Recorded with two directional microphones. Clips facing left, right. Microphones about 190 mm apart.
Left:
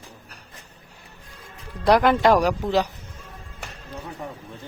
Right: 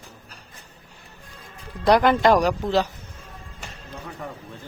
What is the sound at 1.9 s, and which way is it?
A man's voice, 5° left (ahead or behind).